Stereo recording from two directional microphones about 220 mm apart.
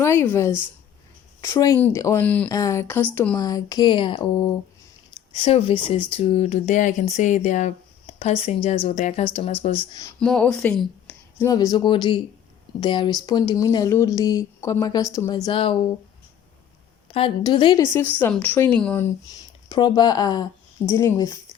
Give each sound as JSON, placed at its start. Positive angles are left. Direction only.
{"t": 0.0, "sound": "speech", "side_deg": 10}
{"t": 10.2, "sound": "speech", "side_deg": 5}
{"t": 15.4, "sound": "speech", "side_deg": 25}
{"t": 17.1, "sound": "speech", "side_deg": 25}
{"t": 19.6, "sound": "speech", "side_deg": 20}